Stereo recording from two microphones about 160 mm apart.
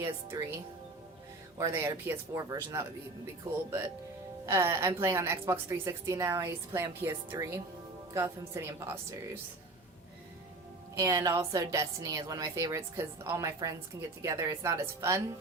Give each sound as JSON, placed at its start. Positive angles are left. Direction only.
{"t": 0.0, "sound": "a woman's voice", "side_deg": -15}
{"t": 1.5, "sound": "a woman's voice", "side_deg": -20}
{"t": 10.9, "sound": "a woman's voice", "side_deg": -20}